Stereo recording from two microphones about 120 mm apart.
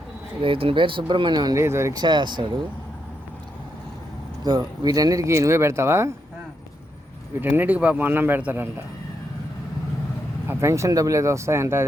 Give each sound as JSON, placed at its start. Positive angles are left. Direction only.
{"t": 0.4, "sound": "speech", "side_deg": -50}
{"t": 1.5, "sound": "speech", "side_deg": -25}
{"t": 2.0, "sound": "speech", "side_deg": -40}
{"t": 4.4, "sound": "speech", "side_deg": -35}
{"t": 7.4, "sound": "speech", "side_deg": -15}
{"t": 10.5, "sound": "speech", "side_deg": -25}